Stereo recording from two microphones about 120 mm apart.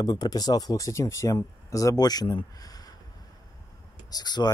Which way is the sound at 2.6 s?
30° left (ahead or behind).